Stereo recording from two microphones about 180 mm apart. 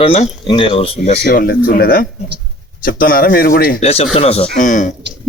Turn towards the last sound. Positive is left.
turn(degrees=45)  # may be behind; listen again after turning